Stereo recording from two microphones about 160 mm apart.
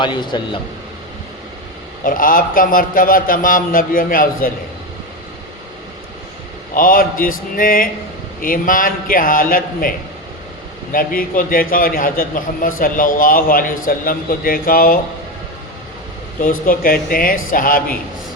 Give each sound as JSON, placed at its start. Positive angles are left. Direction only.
{"t": 0.0, "sound": "a man's voice", "side_deg": 30}
{"t": 2.0, "sound": "a man's voice", "side_deg": 60}
{"t": 6.7, "sound": "a man's voice", "side_deg": 60}
{"t": 10.9, "sound": "a man's voice", "side_deg": 60}
{"t": 16.4, "sound": "a man's voice", "side_deg": 60}